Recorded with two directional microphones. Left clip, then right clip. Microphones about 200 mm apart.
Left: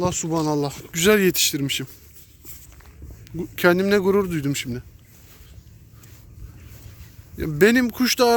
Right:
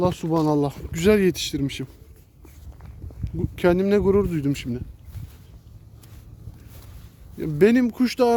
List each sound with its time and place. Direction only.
0.0 s speech: 30° right (ahead or behind); by 1.9 s 10° right (ahead or behind)
3.2 s speech: 5° right (ahead or behind)
7.3 s speech: 5° right (ahead or behind)